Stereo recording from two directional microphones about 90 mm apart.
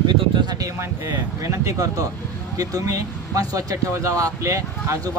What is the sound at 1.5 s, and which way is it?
Speech, 35° right (ahead or behind).